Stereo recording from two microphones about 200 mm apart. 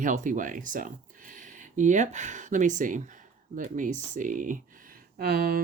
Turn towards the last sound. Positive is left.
turn(degrees=-50)  # may be behind; listen again after turning